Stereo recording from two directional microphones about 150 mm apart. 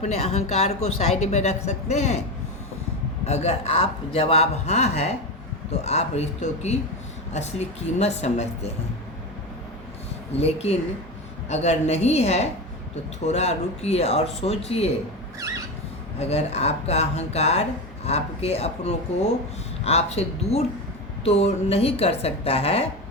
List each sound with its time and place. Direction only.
0.0 s speech: 45° left (ahead or behind)
3.2 s speech: 45° left (ahead or behind)
10.3 s speech: 45° left (ahead or behind)
15.4 s a sound: 20° right (ahead or behind)
16.1 s a woman's voice: 45° left (ahead or behind)